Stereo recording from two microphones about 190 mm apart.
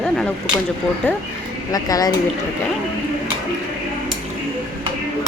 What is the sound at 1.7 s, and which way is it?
Speech, 20° left (ahead or behind).